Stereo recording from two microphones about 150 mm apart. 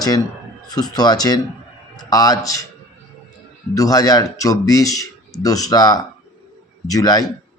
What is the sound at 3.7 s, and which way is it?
Speech, 25° left (ahead or behind).